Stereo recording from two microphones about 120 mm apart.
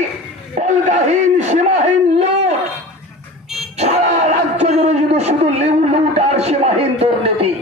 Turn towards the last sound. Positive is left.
turn(degrees=-60)  # may be behind; listen again after turning